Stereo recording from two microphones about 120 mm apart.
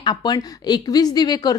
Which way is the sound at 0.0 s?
35° left (ahead or behind).